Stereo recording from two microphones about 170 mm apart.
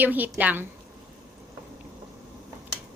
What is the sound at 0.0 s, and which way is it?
Speech, 10° right (ahead or behind).